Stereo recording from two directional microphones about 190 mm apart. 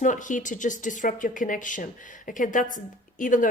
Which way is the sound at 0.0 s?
40° left (ahead or behind).